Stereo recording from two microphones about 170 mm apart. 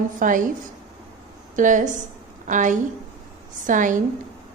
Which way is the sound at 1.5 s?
50° right (ahead or behind).